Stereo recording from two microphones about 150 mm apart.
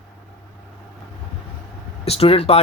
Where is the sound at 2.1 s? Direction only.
40° left (ahead or behind).